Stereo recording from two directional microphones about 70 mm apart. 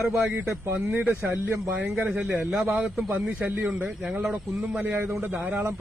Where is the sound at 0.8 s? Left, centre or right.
Right.